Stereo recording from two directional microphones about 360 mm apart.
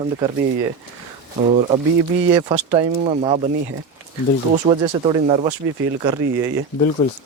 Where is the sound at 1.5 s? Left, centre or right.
Centre.